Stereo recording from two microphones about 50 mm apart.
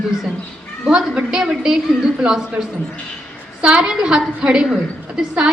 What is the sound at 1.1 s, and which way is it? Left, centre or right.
Speech, centre.